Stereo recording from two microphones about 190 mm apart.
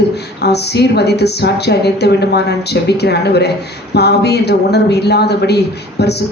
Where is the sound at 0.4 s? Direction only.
60° left (ahead or behind).